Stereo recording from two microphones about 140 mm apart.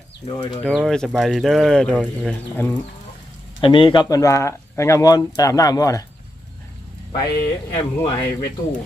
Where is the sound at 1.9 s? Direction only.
10° right (ahead or behind).